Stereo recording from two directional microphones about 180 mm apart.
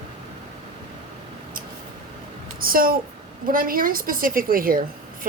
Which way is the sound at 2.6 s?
55° right (ahead or behind).